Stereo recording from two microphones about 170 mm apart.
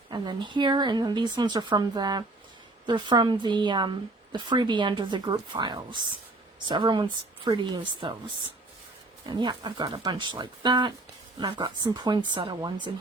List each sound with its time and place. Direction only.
0.1 s a woman's voice: 25° right (ahead or behind)
9.3 s a woman's voice: 25° right (ahead or behind)